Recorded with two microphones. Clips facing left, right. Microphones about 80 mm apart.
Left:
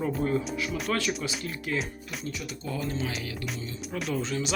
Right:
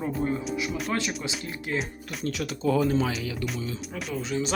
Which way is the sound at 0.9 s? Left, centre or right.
Right.